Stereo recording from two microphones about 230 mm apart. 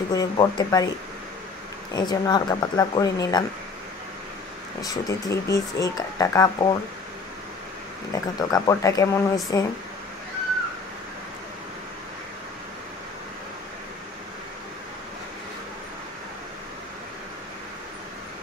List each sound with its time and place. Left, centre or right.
0.1 s speech: centre
1.9 s speech: centre
4.8 s speech: centre
8.1 s speech: centre